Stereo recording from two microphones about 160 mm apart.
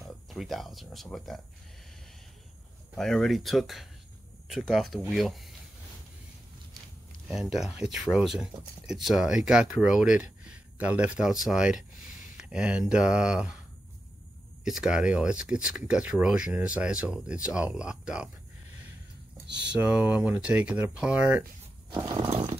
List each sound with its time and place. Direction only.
0.3 s speech: centre (ahead or behind)
3.0 s speech: 5° left (ahead or behind)
7.2 s speech: centre (ahead or behind)
14.6 s speech: 5° right (ahead or behind)
19.4 s a sound: 90° right
19.7 s speech: 10° right (ahead or behind)
21.9 s horse: 25° right (ahead or behind)